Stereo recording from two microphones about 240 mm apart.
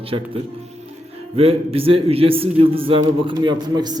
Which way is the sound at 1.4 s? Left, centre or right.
Right.